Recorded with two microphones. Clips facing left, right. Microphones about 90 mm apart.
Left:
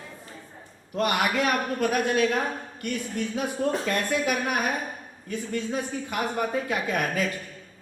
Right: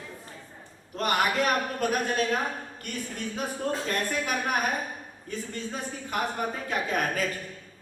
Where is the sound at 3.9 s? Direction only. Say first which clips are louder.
Left 3 dB; 40° right (ahead or behind).